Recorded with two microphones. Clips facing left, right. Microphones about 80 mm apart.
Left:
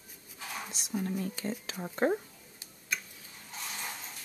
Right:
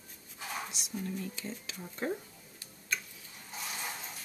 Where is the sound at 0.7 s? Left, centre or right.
Left.